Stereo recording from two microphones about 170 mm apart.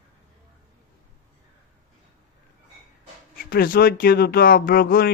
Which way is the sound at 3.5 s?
60° left (ahead or behind).